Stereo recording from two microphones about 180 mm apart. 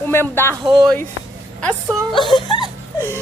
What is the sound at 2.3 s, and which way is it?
Speech, 25° left (ahead or behind).